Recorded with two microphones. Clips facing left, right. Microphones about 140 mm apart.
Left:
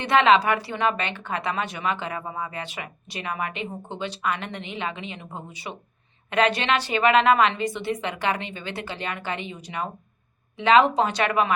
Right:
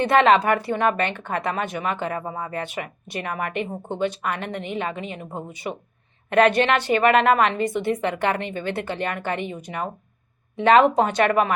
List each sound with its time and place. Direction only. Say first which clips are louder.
0.0 s speech: right 2 dB; 50° right (ahead or behind)